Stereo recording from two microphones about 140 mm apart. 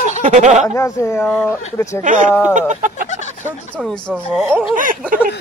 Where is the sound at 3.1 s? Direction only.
55° left (ahead or behind).